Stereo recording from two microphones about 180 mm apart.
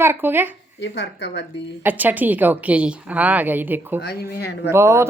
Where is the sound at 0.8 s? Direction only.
75° left (ahead or behind).